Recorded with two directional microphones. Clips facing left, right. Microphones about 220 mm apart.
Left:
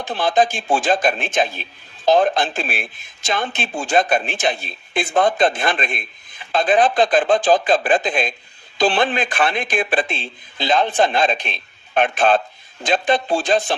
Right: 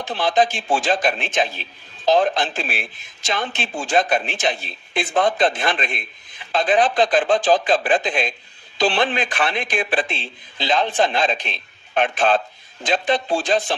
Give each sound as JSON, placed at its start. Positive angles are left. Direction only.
{"t": 0.0, "sound": "speech", "side_deg": 50}
{"t": 3.9, "sound": "speech", "side_deg": 50}